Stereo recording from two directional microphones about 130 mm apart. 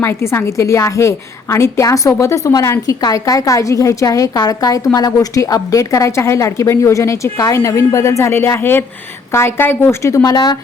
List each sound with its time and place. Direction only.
0.0 s a woman's voice: 20° left (ahead or behind)